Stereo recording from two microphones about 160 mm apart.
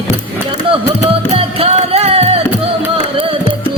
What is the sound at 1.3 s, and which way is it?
Music, 40° right (ahead or behind).